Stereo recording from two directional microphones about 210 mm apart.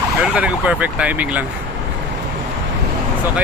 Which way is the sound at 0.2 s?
5° right (ahead or behind).